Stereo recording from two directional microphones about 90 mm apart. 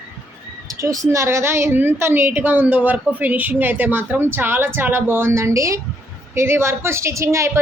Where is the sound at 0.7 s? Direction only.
35° right (ahead or behind).